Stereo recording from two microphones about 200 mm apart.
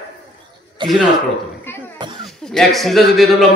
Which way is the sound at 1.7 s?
10° left (ahead or behind).